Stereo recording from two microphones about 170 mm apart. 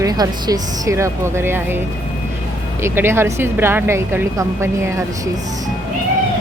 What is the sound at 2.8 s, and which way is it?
A woman's voice, 15° right (ahead or behind).